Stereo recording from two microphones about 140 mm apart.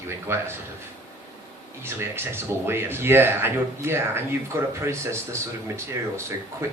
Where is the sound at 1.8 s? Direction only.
15° right (ahead or behind).